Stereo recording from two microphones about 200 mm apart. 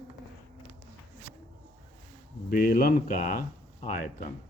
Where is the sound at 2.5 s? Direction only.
45° left (ahead or behind).